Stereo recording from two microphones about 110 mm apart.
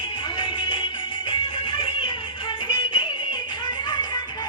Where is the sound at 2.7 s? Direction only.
50° left (ahead or behind).